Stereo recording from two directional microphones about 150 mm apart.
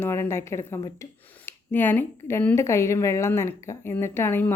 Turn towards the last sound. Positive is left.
turn(degrees=15)  # may be behind; listen again after turning